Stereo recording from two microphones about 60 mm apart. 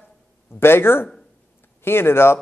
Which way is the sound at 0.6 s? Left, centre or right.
Left.